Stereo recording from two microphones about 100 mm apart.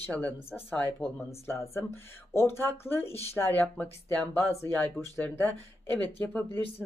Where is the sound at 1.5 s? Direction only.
25° left (ahead or behind).